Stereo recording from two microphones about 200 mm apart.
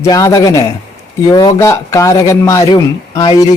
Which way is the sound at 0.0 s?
15° left (ahead or behind).